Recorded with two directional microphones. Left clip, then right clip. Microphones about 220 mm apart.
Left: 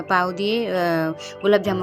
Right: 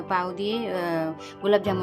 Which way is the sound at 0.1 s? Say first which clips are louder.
Left 6 dB; 20° left (ahead or behind).